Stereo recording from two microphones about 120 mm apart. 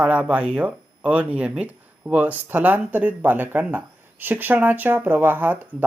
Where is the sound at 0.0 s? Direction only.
10° right (ahead or behind).